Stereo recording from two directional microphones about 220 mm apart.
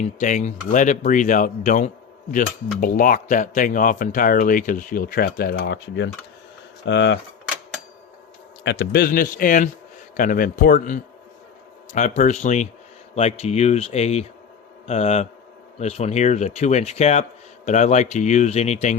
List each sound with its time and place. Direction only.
0.0 s speech: 30° left (ahead or behind); by 6.1 s 50° left (ahead or behind)
6.8 s a sound: 55° left (ahead or behind)
8.6 s speech: 50° left (ahead or behind); by 18.9 s 30° left (ahead or behind)